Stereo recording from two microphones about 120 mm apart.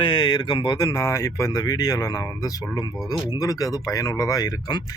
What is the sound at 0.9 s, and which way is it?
Speech, 25° left (ahead or behind).